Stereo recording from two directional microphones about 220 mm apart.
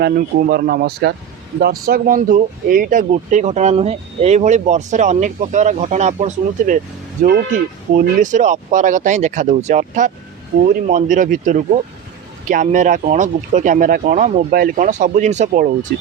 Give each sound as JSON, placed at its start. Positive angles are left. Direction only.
{"t": 0.0, "sound": "speech", "side_deg": -40}